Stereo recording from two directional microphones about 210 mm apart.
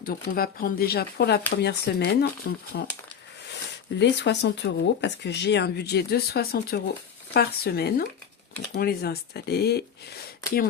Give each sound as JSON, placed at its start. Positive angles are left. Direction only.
{"t": 0.0, "sound": "speech", "side_deg": 45}